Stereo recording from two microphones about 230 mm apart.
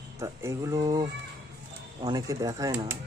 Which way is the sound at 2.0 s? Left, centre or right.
Centre.